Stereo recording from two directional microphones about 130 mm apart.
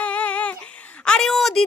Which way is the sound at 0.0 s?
10° left (ahead or behind).